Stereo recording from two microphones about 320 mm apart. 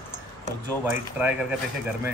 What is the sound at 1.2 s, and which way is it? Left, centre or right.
Speech, centre.